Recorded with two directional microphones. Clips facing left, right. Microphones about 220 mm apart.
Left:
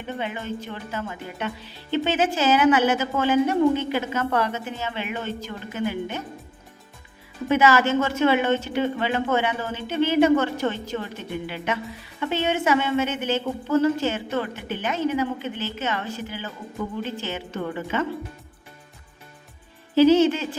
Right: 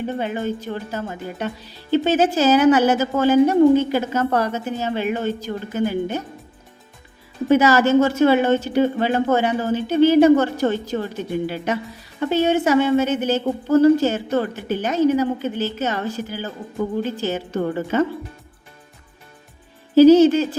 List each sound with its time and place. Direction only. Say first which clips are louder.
0.0 s a woman's voice: right 7 dB; 40° right (ahead or behind)
7.4 s a woman's voice: right 4 dB; 40° right (ahead or behind)
20.0 s a woman's voice: right 6 dB; 40° right (ahead or behind)